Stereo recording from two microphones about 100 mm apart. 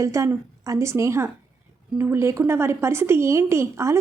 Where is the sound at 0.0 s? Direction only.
30° right (ahead or behind).